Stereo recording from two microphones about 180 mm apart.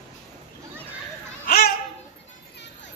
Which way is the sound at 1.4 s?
60° left (ahead or behind).